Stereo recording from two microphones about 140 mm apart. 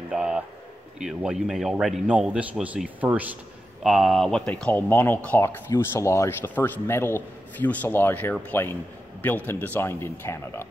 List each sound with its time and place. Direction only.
0.1 s a sound: 5° right (ahead or behind)
0.9 s speech: 5° right (ahead or behind)
3.8 s speech: centre (ahead or behind); by 10.7 s 20° left (ahead or behind)